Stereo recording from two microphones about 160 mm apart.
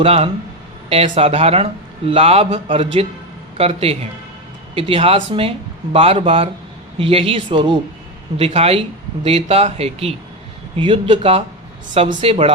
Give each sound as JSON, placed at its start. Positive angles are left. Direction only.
{"t": 0.0, "sound": "speech", "side_deg": -40}